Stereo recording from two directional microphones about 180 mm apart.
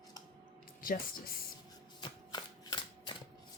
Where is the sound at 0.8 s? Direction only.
50° left (ahead or behind).